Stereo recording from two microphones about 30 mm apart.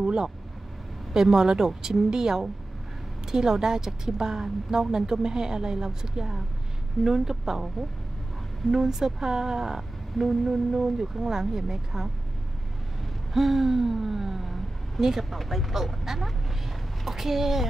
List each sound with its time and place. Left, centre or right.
0.0 s speech: centre
8.7 s speech: centre
9.8 s speech: centre
13.3 s gasp: centre
15.0 s speech: centre
15.2 s speech: centre